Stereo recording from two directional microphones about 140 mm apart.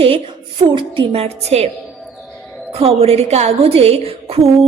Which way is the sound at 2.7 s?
45° right (ahead or behind).